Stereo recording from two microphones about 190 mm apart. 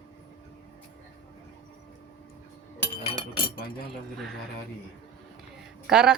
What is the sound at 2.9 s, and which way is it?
Chink, 30° left (ahead or behind).